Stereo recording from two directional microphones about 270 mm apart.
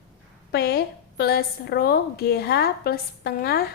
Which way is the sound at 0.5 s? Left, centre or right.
Left.